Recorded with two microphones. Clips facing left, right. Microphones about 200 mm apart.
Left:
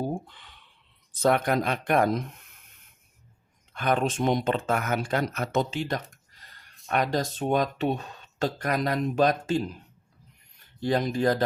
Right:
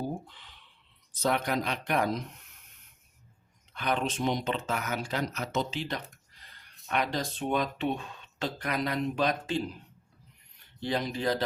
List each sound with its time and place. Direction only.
0.1 s a sound: 55° left (ahead or behind)
1.2 s speech: 50° left (ahead or behind)
3.7 s speech: 50° left (ahead or behind)
10.8 s speech: 45° left (ahead or behind)